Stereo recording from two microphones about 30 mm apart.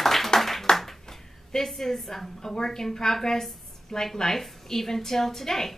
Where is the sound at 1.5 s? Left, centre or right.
Centre.